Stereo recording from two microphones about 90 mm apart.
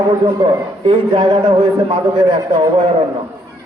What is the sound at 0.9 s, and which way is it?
A man's voice, 60° right (ahead or behind).